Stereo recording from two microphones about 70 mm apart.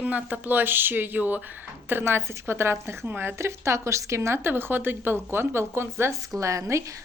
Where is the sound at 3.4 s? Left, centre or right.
Right.